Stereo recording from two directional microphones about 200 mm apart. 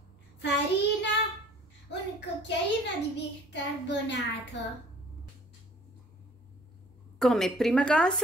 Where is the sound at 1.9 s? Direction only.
60° left (ahead or behind).